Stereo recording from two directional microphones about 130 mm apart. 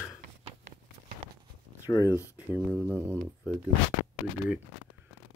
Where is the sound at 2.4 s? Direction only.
15° right (ahead or behind).